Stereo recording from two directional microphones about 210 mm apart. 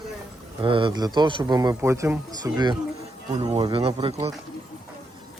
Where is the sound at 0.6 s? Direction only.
25° right (ahead or behind).